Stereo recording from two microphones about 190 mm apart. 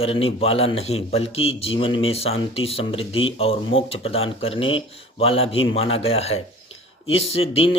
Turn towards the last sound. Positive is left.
turn(degrees=30)  # may be behind; listen again after turning